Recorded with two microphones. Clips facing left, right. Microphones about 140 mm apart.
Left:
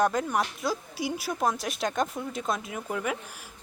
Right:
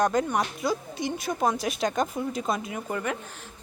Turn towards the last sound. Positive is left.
turn(degrees=0)  # may be behind; listen again after turning